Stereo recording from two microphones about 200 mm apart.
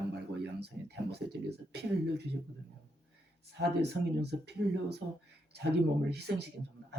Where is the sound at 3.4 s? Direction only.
55° right (ahead or behind).